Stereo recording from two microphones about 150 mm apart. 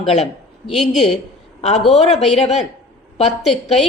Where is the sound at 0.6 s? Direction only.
Centre (ahead or behind).